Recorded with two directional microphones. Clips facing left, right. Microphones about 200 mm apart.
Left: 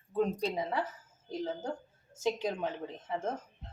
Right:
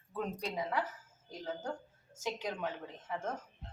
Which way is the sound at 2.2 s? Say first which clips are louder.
Left 5 dB; 30° left (ahead or behind).